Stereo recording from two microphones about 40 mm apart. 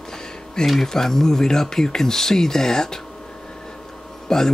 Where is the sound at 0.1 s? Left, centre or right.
Centre.